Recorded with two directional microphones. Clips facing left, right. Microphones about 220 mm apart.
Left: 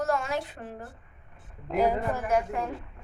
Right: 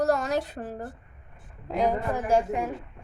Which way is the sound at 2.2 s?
30° right (ahead or behind).